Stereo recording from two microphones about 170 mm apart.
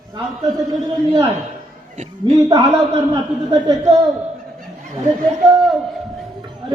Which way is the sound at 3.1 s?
25° right (ahead or behind).